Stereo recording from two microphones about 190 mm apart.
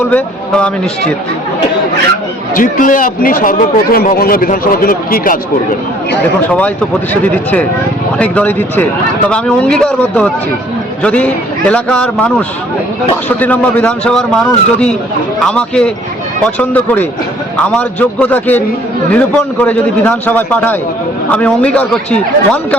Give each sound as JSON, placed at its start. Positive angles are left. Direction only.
{"t": 0.1, "sound": "a man's voice", "side_deg": 5}
{"t": 2.6, "sound": "a man's voice", "side_deg": 45}
{"t": 8.2, "sound": "a man's voice", "side_deg": 10}